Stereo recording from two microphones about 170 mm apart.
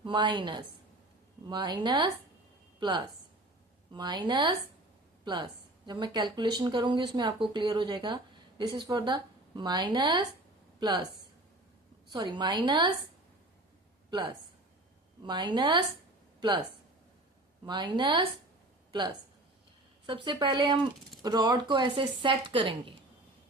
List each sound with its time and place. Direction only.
0.0 s a woman's voice: 25° right (ahead or behind)
3.9 s speech: 25° right (ahead or behind)
12.1 s speech: 25° right (ahead or behind)
14.1 s speech: 25° right (ahead or behind)
17.7 s speech: 25° right (ahead or behind)